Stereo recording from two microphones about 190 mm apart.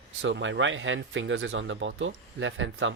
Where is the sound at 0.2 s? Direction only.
75° right (ahead or behind).